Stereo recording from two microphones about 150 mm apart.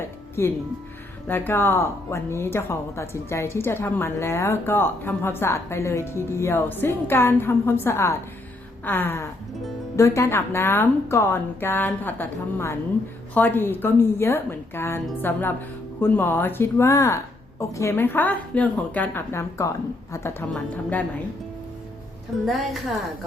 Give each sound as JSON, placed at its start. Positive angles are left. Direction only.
{"t": 0.4, "sound": "speech", "side_deg": 20}
{"t": 22.4, "sound": "a woman's voice", "side_deg": 0}